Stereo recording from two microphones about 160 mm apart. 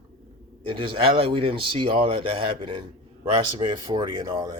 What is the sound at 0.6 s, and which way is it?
A man's voice, 30° right (ahead or behind).